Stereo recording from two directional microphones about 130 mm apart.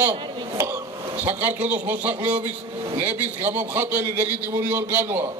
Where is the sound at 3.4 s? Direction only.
15° right (ahead or behind).